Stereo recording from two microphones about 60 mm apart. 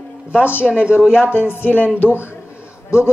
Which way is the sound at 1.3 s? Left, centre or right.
Left.